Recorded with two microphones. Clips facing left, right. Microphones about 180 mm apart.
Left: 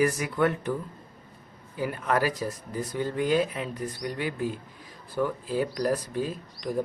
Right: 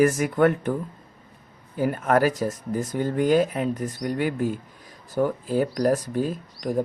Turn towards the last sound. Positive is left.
turn(degrees=-45)  # may be behind; listen again after turning